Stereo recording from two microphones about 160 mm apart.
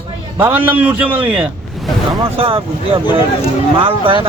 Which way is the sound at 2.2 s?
35° right (ahead or behind).